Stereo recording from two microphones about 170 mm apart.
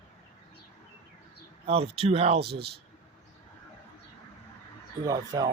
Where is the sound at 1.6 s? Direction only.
35° right (ahead or behind).